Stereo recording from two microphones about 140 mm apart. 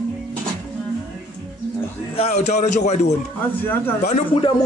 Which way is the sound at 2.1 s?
50° left (ahead or behind).